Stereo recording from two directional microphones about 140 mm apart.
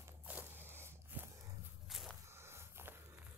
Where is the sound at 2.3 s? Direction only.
20° right (ahead or behind).